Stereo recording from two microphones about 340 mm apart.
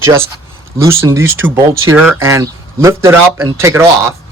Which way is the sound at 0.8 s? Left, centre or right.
Centre.